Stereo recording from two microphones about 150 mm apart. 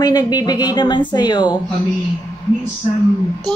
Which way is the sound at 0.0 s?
25° left (ahead or behind).